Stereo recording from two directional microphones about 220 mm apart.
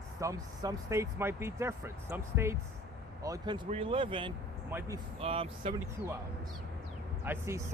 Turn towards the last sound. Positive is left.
turn(degrees=-10)  # may be behind; listen again after turning